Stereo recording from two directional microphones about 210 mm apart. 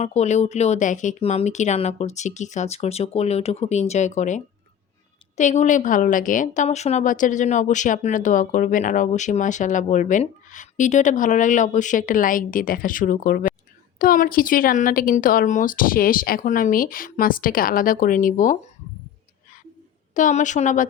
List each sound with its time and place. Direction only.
0.0 s a woman's voice: 30° left (ahead or behind)
20.1 s a woman's voice: 35° left (ahead or behind)